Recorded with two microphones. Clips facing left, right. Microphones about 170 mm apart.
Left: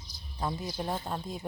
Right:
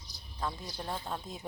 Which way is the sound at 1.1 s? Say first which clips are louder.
Left 3 dB; centre (ahead or behind).